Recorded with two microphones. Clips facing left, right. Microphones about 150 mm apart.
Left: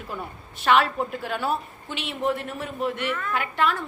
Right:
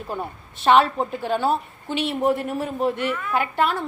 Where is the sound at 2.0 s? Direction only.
40° right (ahead or behind).